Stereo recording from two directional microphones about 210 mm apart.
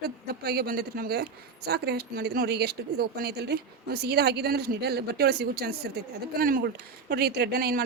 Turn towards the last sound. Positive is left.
turn(degrees=-45)  # may be behind; listen again after turning